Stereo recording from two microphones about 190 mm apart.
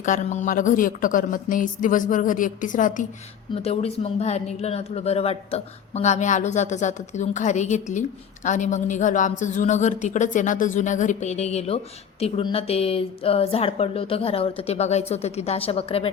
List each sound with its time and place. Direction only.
0.0 s a woman's voice: 40° left (ahead or behind)
3.5 s speech: 30° left (ahead or behind)